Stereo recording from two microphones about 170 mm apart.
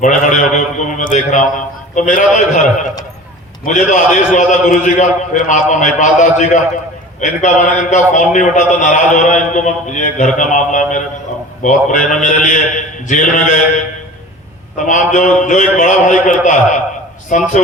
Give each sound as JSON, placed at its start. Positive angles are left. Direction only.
{"t": 0.0, "sound": "a man's voice", "side_deg": 45}
{"t": 3.6, "sound": "a man's voice", "side_deg": 45}